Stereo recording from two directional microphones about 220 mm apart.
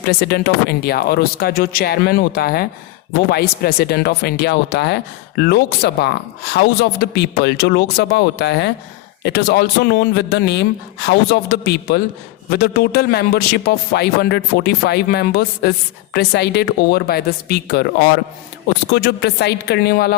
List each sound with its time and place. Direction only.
0.0 s speech: 50° left (ahead or behind)